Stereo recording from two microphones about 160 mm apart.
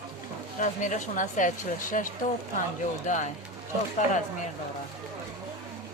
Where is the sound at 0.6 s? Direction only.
50° left (ahead or behind).